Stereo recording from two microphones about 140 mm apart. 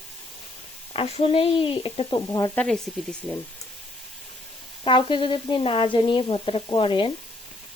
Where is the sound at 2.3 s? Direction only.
25° left (ahead or behind).